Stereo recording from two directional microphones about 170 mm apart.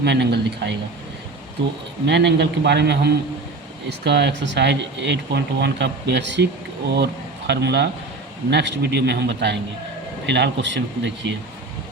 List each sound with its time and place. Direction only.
0.0 s a man's voice: 80° right
2.0 s a man's voice: 90° right